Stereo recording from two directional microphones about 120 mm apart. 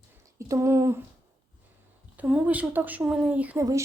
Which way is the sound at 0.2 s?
25° right (ahead or behind).